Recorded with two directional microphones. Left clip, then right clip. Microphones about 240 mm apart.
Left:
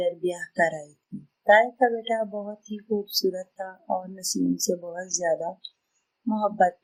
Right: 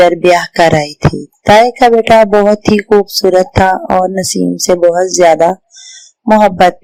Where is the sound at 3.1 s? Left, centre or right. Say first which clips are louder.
Right 19 dB; right.